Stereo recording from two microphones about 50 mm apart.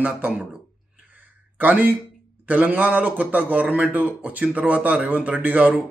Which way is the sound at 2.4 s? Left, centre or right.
Right.